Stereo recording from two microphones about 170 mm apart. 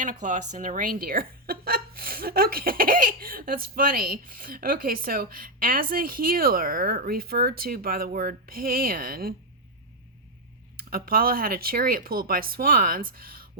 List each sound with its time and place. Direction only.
0.0 s speech: 50° right (ahead or behind)
10.8 s speech: 60° right (ahead or behind)